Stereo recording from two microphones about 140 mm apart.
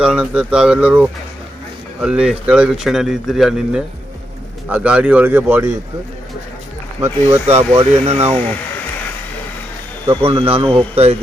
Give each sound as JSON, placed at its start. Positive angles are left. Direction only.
{"t": 0.0, "sound": "speech", "side_deg": -5}
{"t": 7.0, "sound": "speech", "side_deg": -20}
{"t": 7.4, "sound": "speech", "side_deg": -50}
{"t": 10.1, "sound": "speech", "side_deg": -40}